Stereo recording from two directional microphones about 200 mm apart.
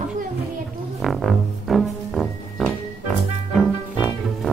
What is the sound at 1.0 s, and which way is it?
Music, centre (ahead or behind).